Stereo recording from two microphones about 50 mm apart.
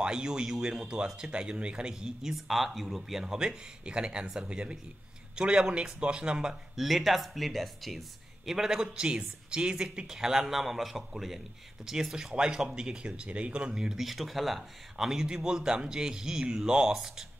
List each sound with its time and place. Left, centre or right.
0.0 s speech: centre
2.3 s a man's voice: centre
6.8 s speech: centre
8.5 s speech: centre
13.7 s speech: centre